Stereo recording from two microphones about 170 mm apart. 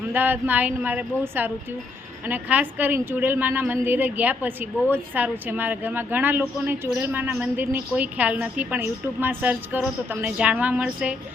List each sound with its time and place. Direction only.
0.1 s a woman's voice: 10° right (ahead or behind)